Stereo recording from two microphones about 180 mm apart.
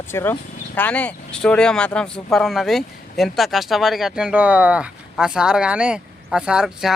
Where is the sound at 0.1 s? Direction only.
15° left (ahead or behind).